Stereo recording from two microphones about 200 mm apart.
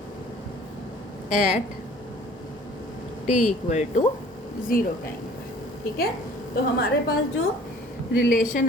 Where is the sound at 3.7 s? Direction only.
35° left (ahead or behind).